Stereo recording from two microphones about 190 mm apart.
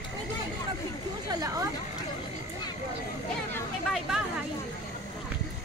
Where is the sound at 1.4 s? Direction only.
20° right (ahead or behind).